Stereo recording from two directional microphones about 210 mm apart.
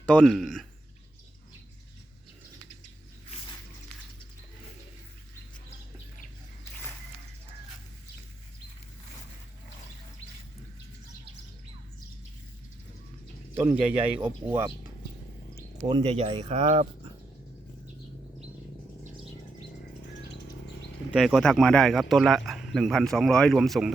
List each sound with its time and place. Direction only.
0.0 s speech: 5° left (ahead or behind)
3.2 s music: 25° left (ahead or behind)
13.7 s speech: 10° right (ahead or behind)
15.8 s speech: 25° right (ahead or behind)
21.1 s speech: centre (ahead or behind)